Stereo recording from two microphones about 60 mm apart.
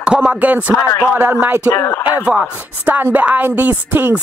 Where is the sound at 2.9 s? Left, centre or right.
Right.